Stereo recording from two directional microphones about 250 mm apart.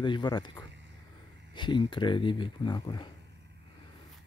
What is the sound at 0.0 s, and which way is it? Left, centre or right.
Speech, centre.